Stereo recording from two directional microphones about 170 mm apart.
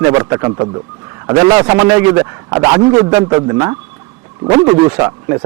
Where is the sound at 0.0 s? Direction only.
20° right (ahead or behind).